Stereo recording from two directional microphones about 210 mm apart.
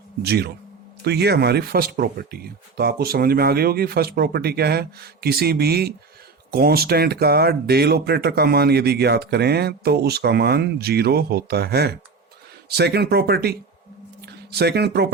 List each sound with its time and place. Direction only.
0.2 s speech: 50° right (ahead or behind)